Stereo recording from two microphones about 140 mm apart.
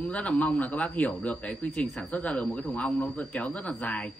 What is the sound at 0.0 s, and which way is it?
A man's voice, 10° left (ahead or behind).